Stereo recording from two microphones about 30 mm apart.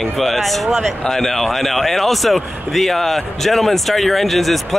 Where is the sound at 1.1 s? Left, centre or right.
Centre.